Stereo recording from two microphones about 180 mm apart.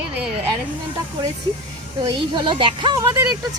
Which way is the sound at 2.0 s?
25° right (ahead or behind).